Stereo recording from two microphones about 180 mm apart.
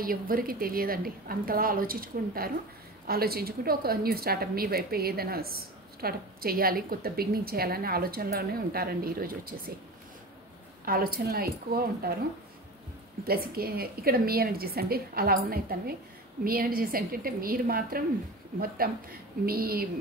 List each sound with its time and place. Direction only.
0.0 s a woman's voice: 55° right (ahead or behind)
10.9 s a woman's voice: 55° right (ahead or behind)
13.2 s a woman's voice: 55° right (ahead or behind)